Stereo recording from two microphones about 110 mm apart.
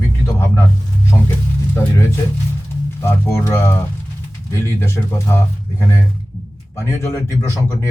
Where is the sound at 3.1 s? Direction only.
25° left (ahead or behind).